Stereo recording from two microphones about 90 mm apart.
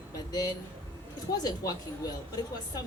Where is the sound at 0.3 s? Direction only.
45° left (ahead or behind).